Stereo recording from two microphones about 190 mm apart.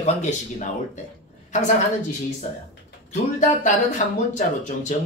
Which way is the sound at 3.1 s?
40° left (ahead or behind).